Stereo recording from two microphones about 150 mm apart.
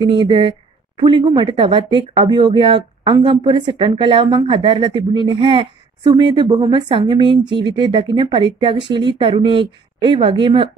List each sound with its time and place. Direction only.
0.0 s speech: 35° right (ahead or behind)